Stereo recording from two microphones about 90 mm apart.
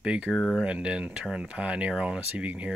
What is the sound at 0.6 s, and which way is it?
Speech, 10° right (ahead or behind).